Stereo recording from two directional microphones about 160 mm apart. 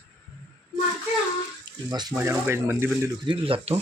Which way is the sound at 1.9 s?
25° right (ahead or behind).